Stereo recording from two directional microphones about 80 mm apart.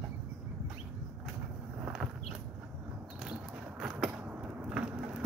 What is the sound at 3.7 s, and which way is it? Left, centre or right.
Skateboard, centre.